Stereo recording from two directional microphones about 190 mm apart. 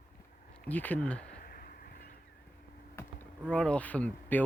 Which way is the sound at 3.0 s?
10° left (ahead or behind).